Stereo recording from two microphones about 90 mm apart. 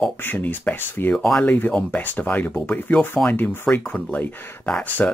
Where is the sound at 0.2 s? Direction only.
20° left (ahead or behind).